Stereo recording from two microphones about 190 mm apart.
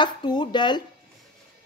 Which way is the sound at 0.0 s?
25° left (ahead or behind).